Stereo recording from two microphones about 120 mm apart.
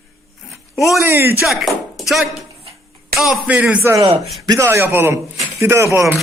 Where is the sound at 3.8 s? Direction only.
20° right (ahead or behind).